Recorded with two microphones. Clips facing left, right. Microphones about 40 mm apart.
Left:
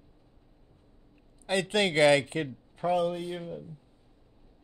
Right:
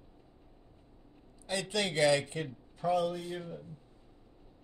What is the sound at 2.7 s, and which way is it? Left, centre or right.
Speech, left.